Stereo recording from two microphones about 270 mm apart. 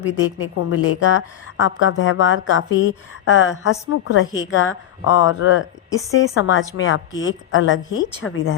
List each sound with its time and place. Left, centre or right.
0.0 s a woman's voice: left